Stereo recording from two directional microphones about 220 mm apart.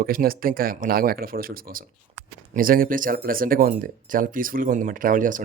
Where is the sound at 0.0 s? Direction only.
40° right (ahead or behind).